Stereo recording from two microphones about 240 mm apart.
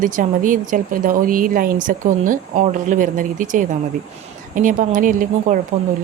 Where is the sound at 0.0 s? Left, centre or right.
Right.